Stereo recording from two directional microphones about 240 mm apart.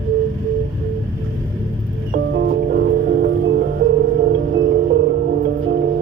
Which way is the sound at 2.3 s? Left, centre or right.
Right.